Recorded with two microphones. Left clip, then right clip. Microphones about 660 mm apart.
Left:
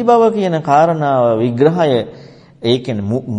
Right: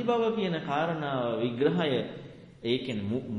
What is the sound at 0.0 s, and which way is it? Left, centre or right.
A man's voice, left.